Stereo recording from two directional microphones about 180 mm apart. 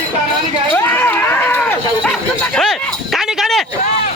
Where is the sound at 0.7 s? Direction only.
10° left (ahead or behind).